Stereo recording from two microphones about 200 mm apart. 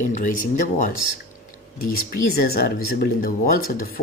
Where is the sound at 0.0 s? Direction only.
40° left (ahead or behind).